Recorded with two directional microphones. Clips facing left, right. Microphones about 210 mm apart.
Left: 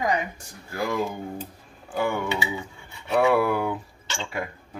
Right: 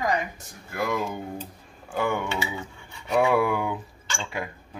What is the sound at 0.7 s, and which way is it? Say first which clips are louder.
Speech: left 1 dB; 5° left (ahead or behind).